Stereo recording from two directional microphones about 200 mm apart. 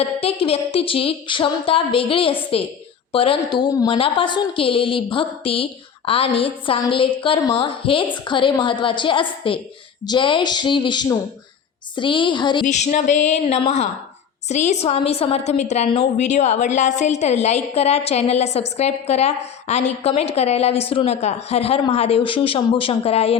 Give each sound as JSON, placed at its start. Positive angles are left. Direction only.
{"t": 0.0, "sound": "a woman's voice", "side_deg": 30}
{"t": 12.6, "sound": "a woman's voice", "side_deg": 35}